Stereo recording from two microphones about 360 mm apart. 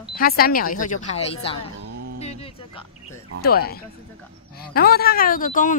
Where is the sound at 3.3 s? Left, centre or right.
Left.